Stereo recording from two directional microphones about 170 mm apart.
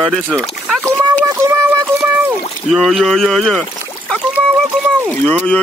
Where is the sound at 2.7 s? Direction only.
Centre (ahead or behind).